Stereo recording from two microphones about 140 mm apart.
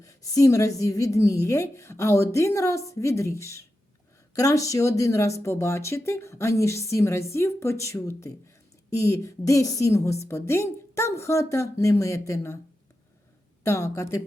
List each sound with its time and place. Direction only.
0.0 s a woman's voice: 25° left (ahead or behind)
13.7 s a woman's voice: 20° left (ahead or behind)